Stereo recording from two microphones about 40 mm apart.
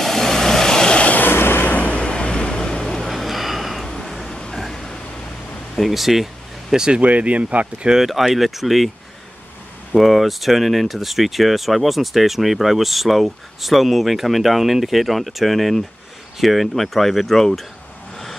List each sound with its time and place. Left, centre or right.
0.0 s vehicle: centre
1.3 s a sound: left
1.6 s vehicle: left; by 3.1 s centre
3.1 s a sound: centre
5.8 s speech: centre
6.7 s speech: centre
7.0 s speech: right
7.9 s speech: centre
9.9 s speech: centre
18.1 s vehicle: centre